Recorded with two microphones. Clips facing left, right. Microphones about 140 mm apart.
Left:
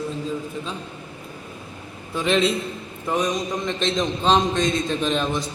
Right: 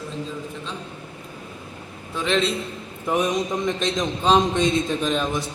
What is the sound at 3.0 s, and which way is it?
A man's voice, 15° right (ahead or behind).